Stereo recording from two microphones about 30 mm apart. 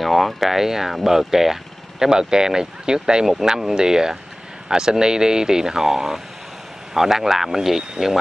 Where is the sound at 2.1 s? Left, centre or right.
Right.